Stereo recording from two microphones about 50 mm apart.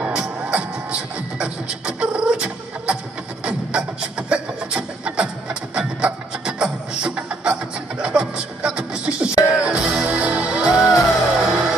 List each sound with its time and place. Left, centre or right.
0.0 s music: right
1.4 s beatboxing: centre
3.4 s music: centre
10.6 s music: centre